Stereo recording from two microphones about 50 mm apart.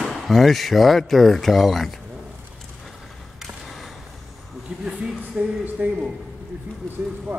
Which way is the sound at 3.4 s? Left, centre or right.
Centre.